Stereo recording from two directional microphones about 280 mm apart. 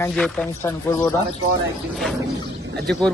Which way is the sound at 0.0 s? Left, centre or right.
Centre.